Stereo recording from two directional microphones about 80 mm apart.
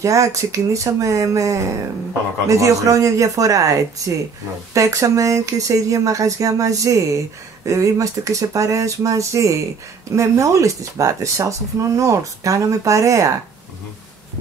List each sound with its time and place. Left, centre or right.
0.0 s speech: right